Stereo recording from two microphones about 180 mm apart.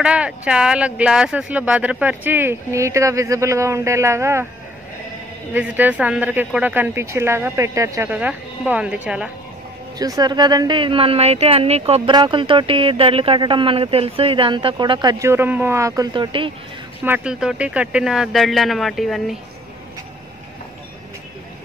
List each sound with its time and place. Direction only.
0.0 s speech: 5° right (ahead or behind)
5.5 s speech: 10° right (ahead or behind)
9.9 s speech: 20° right (ahead or behind)
17.0 s speech: 10° right (ahead or behind)